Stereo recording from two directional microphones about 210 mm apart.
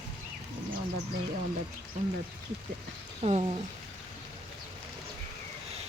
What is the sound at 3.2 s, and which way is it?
Speech, 30° right (ahead or behind).